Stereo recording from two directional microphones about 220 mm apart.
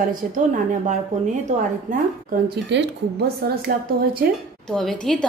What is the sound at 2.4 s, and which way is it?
A woman's voice, 50° right (ahead or behind).